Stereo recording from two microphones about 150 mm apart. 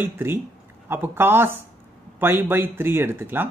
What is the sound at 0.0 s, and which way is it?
Speech, 15° right (ahead or behind).